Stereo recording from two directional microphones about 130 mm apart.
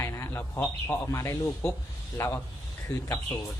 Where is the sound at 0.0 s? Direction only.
20° left (ahead or behind).